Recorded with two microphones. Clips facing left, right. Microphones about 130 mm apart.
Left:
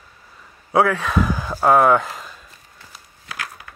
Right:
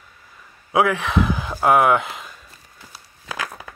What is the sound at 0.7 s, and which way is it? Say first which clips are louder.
Speech: left 1 dB; 15° right (ahead or behind).